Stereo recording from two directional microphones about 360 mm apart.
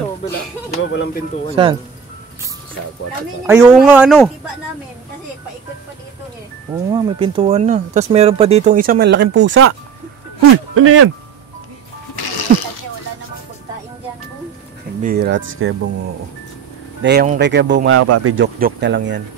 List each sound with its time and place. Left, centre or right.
1.5 s speech: centre
3.4 s speech: centre
6.7 s speech: centre; by 11.1 s right
12.2 s music: left
15.0 s speech: right
17.0 s speech: right